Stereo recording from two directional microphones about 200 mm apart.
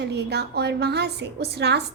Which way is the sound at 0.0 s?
55° right (ahead or behind).